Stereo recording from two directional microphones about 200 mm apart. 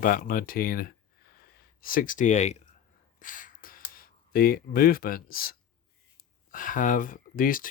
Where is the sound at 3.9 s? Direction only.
45° left (ahead or behind).